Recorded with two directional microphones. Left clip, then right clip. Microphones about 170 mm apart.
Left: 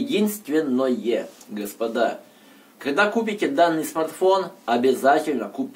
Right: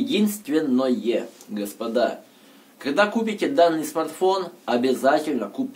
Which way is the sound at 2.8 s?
30° right (ahead or behind).